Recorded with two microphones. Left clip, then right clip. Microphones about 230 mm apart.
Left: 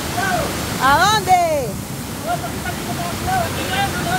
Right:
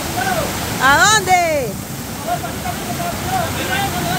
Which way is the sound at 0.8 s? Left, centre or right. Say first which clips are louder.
Right 2 dB; centre.